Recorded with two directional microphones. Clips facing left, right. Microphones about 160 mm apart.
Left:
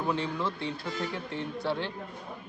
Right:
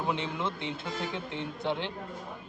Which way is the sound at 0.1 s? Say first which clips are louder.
Left 2 dB; 20° right (ahead or behind).